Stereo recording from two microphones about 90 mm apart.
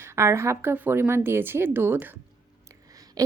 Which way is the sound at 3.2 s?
45° right (ahead or behind).